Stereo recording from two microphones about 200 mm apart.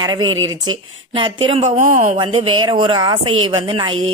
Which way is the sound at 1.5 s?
30° right (ahead or behind).